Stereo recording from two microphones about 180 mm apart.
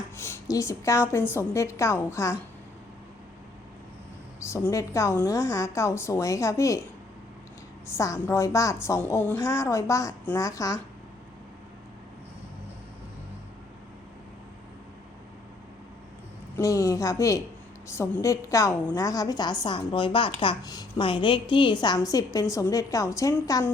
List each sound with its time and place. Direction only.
0.2 s a woman's voice: 15° left (ahead or behind)
4.4 s a woman's voice: 15° left (ahead or behind)
7.9 s a woman's voice: 15° left (ahead or behind)
16.6 s a woman's voice: 20° left (ahead or behind)